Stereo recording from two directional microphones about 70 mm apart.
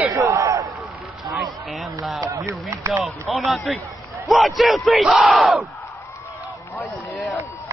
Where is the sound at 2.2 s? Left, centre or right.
Right.